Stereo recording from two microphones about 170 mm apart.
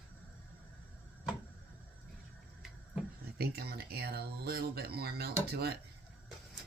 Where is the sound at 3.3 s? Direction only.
70° right (ahead or behind).